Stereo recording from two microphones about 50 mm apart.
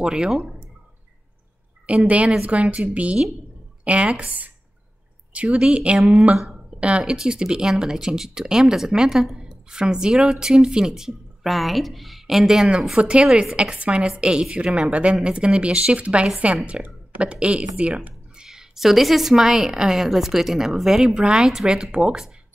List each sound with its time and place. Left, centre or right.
0.0 s speech: centre
1.9 s a woman's voice: right
5.9 s speech: centre
6.8 s a woman's voice: right; by 21.2 s centre
21.2 s speech: centre